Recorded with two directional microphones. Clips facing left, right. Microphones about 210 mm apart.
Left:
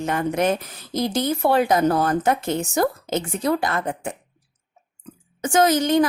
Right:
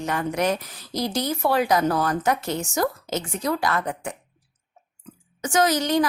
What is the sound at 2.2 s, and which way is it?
A woman's voice, 55° left (ahead or behind).